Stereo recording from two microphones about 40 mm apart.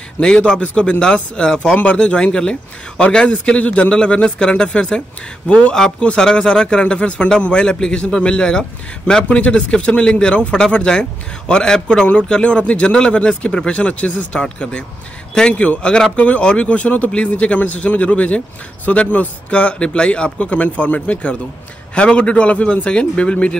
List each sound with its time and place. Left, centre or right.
0.2 s a man's voice: left
3.5 s a man's voice: left; by 12.1 s centre
12.1 s a man's voice: left